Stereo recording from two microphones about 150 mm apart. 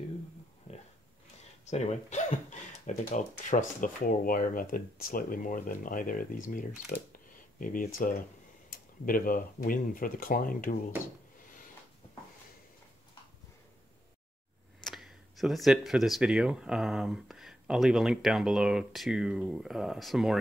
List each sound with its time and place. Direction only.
0.7 s pig: 45° left (ahead or behind)
1.7 s speech: 50° left (ahead or behind); by 10.8 s 65° left (ahead or behind)
14.9 s speech: centre (ahead or behind)